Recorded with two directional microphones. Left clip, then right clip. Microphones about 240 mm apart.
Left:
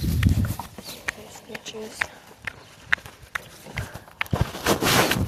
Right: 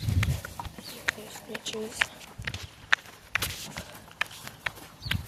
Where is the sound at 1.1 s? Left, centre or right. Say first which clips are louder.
Right 1 dB; centre.